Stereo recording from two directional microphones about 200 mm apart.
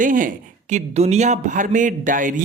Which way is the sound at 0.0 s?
40° right (ahead or behind).